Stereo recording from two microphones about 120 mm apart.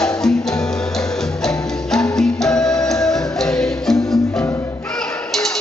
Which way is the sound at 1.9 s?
5° left (ahead or behind).